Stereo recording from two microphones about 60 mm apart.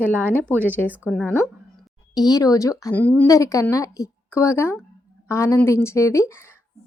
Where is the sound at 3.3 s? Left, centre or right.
Left.